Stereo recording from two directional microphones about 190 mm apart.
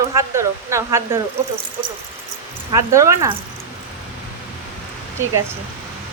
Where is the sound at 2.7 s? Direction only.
15° right (ahead or behind).